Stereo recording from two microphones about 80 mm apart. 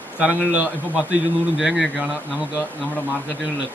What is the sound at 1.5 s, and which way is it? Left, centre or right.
Speech, centre.